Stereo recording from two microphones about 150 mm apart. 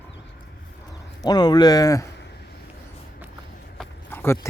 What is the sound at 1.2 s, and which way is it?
Speech, 25° left (ahead or behind).